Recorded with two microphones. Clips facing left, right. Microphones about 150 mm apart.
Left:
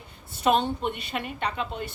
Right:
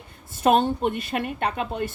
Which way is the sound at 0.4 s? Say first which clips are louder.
Right 4 dB; 50° right (ahead or behind).